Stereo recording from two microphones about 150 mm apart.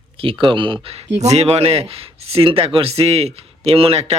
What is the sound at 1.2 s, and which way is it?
Speech, 45° right (ahead or behind).